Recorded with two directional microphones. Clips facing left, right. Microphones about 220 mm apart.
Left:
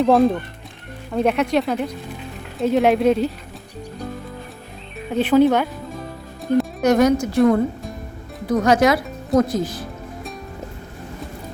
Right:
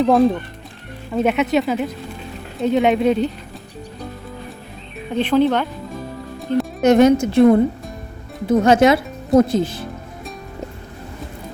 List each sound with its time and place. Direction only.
0.0 s speech: centre (ahead or behind)
5.1 s speech: 10° left (ahead or behind)
6.8 s speech: 25° right (ahead or behind)